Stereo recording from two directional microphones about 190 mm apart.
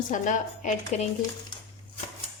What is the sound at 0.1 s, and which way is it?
Speech, 40° left (ahead or behind).